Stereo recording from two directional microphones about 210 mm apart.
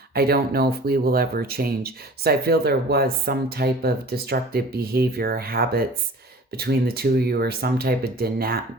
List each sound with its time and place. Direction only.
0.1 s speech: 45° right (ahead or behind)